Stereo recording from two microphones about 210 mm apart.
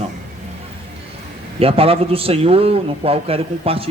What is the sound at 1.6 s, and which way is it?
A man's voice, 25° right (ahead or behind).